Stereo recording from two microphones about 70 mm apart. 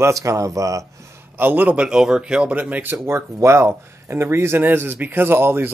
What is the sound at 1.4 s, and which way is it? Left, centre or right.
Speech, right.